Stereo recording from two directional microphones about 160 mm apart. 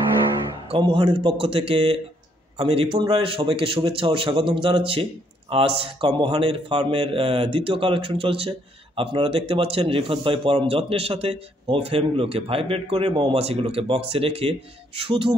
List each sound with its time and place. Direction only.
0.7 s a man's voice: 35° right (ahead or behind)